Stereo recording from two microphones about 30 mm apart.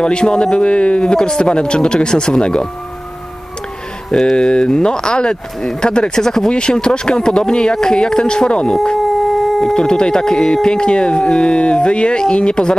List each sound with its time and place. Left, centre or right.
0.0 s speech: left
4.1 s speech: left
6.1 s speech: centre
6.5 s speech: left
8.9 s howl: centre
9.8 s speech: left